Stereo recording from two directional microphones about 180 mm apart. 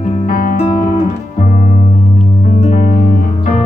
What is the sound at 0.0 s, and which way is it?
Music, 45° left (ahead or behind).